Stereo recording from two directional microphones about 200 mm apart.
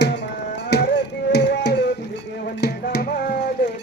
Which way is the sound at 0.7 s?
55° left (ahead or behind).